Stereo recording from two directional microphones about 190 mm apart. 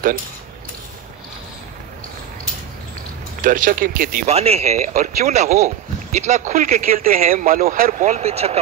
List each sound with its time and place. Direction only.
3.4 s speech: 45° right (ahead or behind)
4.3 s speech: 35° right (ahead or behind)